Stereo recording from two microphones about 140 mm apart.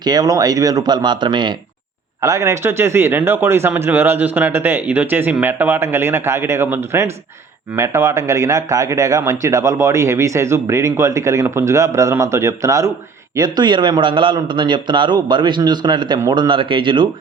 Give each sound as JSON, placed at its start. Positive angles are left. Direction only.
{"t": 0.0, "sound": "a man's voice", "side_deg": -30}